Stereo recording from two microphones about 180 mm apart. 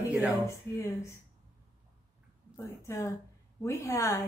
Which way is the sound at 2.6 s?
15° left (ahead or behind).